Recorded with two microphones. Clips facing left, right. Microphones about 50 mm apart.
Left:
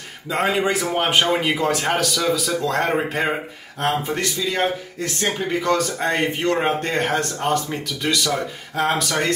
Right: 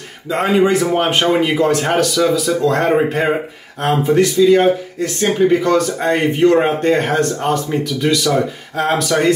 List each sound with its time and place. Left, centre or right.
0.3 s speech: centre